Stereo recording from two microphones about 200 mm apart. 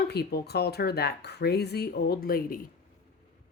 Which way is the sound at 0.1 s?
50° left (ahead or behind).